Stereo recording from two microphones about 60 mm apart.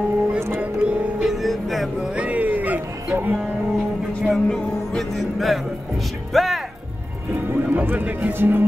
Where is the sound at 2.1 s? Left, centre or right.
Right.